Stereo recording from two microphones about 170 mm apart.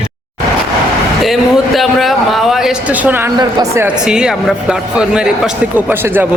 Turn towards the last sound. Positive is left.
turn(degrees=-10)  # may be behind; listen again after turning